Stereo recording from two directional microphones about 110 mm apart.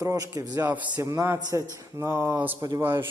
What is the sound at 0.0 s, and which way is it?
Speech, 30° right (ahead or behind).